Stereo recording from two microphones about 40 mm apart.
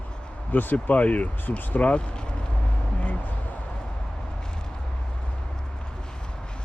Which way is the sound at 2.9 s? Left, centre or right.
Left.